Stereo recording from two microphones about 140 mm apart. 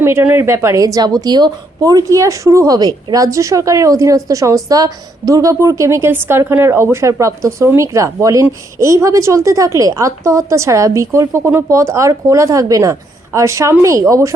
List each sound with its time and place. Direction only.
0.0 s a woman's voice: 15° right (ahead or behind)